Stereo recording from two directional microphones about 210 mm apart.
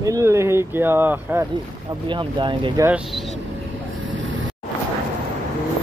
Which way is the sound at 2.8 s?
5° right (ahead or behind).